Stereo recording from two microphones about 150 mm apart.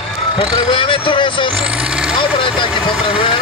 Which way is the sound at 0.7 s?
35° left (ahead or behind).